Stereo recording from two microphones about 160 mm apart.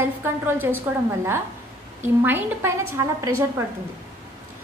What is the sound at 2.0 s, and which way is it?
Speech, 15° right (ahead or behind).